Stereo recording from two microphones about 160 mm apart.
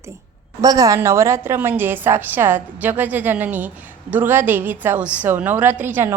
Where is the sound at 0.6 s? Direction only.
20° right (ahead or behind).